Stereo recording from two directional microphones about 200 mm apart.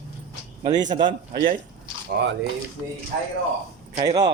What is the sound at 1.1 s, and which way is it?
Speech, 45° right (ahead or behind).